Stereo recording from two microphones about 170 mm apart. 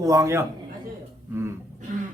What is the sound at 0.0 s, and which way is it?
Speech, 20° right (ahead or behind).